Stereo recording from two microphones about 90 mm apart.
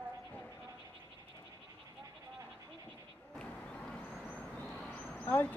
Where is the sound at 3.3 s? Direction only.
10° left (ahead or behind).